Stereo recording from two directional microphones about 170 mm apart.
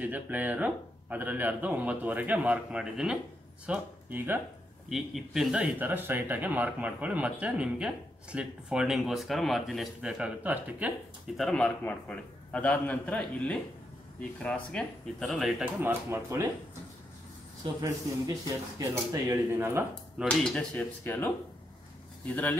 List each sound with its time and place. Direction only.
0.0 s speech: 10° right (ahead or behind)
11.3 s a man's voice: 5° left (ahead or behind)
15.6 s speech: 15° right (ahead or behind)
18.8 s speech: 20° right (ahead or behind)
20.2 s a man's voice: 5° left (ahead or behind)
22.3 s a man's voice: 10° left (ahead or behind)